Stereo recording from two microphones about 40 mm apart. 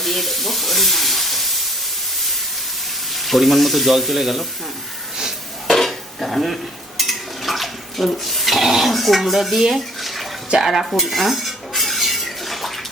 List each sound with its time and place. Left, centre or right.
0.0 s frying: centre
3.1 s speech: centre
5.6 s dishes: centre
10.6 s cutlery: centre